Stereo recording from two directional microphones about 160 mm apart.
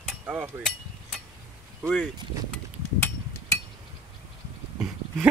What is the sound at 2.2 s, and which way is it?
Speech, 30° right (ahead or behind).